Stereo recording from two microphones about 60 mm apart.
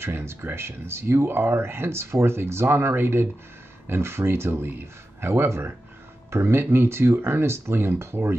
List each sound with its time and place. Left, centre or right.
0.0 s speech: right